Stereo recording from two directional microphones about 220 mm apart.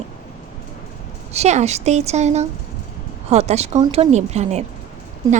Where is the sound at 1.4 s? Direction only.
30° right (ahead or behind).